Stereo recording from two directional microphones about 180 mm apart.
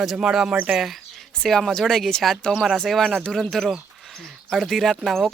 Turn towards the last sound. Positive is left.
turn(degrees=0)  # may be behind; listen again after turning